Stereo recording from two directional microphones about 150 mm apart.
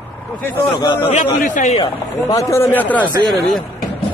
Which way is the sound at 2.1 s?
15° left (ahead or behind).